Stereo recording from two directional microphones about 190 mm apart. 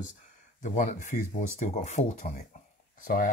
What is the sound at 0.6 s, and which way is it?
Speech, 40° left (ahead or behind).